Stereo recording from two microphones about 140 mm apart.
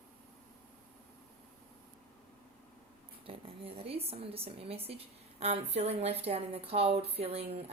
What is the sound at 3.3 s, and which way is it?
A woman's voice, 40° right (ahead or behind).